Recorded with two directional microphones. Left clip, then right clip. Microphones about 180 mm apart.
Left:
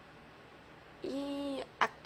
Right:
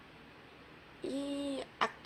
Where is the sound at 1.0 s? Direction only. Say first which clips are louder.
Even; centre (ahead or behind).